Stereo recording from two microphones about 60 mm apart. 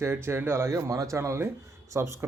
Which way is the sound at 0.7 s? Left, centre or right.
Right.